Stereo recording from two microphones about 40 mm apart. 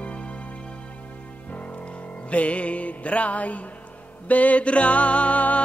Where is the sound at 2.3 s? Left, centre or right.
Left.